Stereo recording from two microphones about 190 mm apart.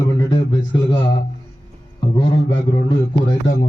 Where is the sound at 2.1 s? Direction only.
25° left (ahead or behind).